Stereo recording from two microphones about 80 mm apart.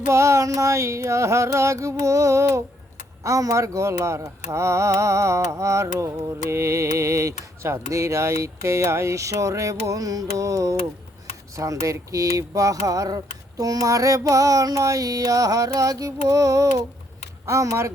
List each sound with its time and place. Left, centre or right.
0.0 s speech: right